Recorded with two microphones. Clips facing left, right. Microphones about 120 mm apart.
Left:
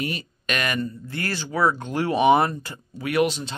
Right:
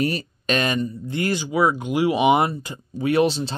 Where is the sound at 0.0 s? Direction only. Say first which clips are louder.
Right 6 dB; 40° right (ahead or behind).